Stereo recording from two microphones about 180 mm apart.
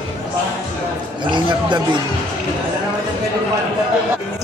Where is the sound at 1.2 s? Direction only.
25° right (ahead or behind).